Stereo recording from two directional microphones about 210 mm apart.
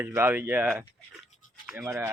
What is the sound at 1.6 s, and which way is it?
Rub, centre (ahead or behind).